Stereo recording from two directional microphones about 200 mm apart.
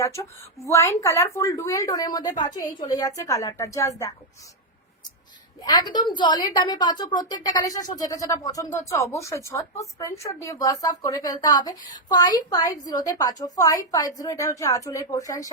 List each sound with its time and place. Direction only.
0.0 s a woman's voice: 15° left (ahead or behind)
5.6 s a woman's voice: 20° left (ahead or behind)